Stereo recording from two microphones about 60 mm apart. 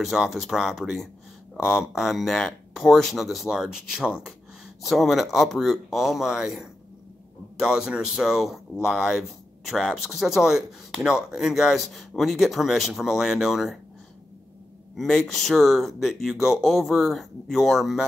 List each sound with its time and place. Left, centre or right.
0.0 s speech: centre
4.8 s speech: centre
15.0 s speech: centre